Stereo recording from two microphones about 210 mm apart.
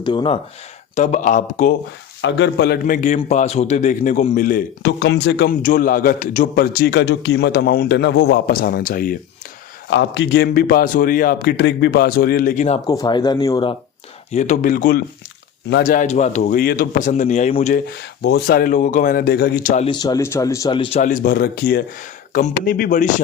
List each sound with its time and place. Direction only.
0.0 s speech: 20° left (ahead or behind)
0.9 s a man's voice: 35° left (ahead or behind)
2.2 s a man's voice: 55° left (ahead or behind)
9.9 s a man's voice: 60° left (ahead or behind); by 12.8 s 35° left (ahead or behind)
12.9 s speech: 20° left (ahead or behind)
14.3 s a man's voice: 35° left (ahead or behind)
18.2 s a man's voice: 50° left (ahead or behind)
19.9 s speech: 20° left (ahead or behind)
21.0 s a man's voice: 40° left (ahead or behind)